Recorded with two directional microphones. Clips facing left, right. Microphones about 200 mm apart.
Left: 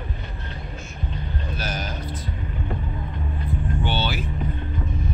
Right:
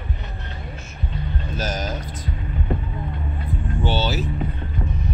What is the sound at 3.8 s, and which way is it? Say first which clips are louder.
Boat: right 5 dB; 40° right (ahead or behind).